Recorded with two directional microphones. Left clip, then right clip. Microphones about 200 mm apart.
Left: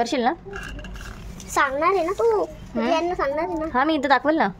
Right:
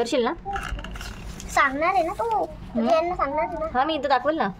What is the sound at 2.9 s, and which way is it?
Speech, 40° left (ahead or behind).